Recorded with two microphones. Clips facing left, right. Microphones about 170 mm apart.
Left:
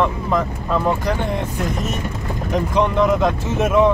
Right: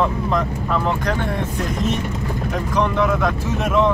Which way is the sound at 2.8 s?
20° left (ahead or behind).